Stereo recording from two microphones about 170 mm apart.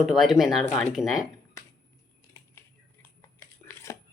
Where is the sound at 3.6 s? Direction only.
15° left (ahead or behind).